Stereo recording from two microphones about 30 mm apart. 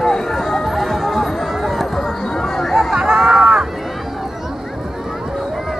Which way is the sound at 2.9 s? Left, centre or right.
Right.